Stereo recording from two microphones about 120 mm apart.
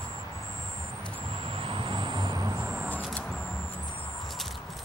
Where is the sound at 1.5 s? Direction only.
50° right (ahead or behind); by 2.5 s 30° right (ahead or behind).